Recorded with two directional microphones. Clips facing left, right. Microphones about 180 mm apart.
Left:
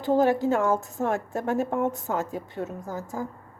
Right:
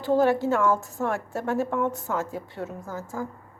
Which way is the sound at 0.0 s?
20° left (ahead or behind).